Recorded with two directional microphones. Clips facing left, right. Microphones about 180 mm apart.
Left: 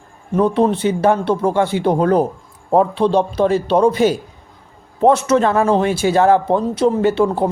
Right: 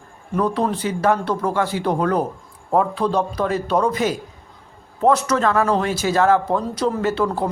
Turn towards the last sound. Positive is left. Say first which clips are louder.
# left 5 dB
turn(degrees=25)  # may be behind; listen again after turning